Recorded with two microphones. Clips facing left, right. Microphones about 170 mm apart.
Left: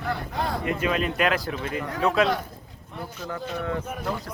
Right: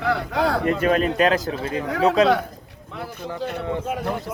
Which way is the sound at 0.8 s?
40° right (ahead or behind).